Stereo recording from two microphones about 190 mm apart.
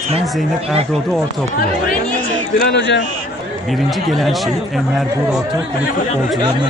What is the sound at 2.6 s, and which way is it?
Speech, 65° left (ahead or behind).